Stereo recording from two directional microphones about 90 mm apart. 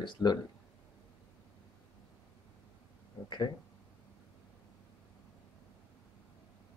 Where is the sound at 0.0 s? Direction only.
50° left (ahead or behind).